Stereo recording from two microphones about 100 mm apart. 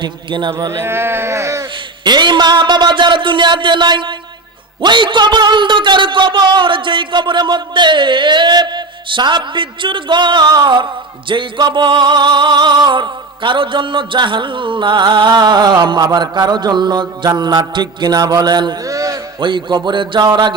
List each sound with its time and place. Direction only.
0.0 s speech: 50° right (ahead or behind)
0.7 s speech: 25° right (ahead or behind)
2.0 s speech: 50° right (ahead or behind)
19.4 s speech: 55° right (ahead or behind)